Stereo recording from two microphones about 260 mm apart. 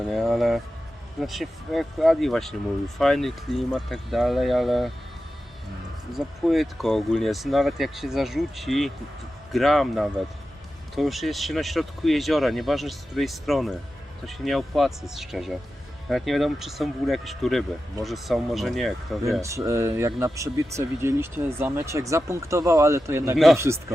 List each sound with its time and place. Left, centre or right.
0.1 s speech: centre
6.1 s speech: centre
19.4 s speech: centre